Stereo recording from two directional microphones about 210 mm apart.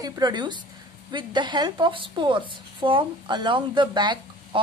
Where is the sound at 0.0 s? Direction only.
20° right (ahead or behind).